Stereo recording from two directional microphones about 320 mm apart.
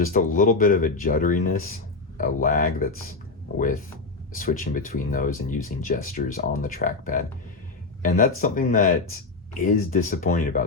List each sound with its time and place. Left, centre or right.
0.0 s speech: left